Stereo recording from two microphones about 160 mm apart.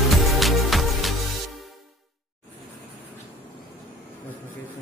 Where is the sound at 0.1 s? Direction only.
Centre (ahead or behind).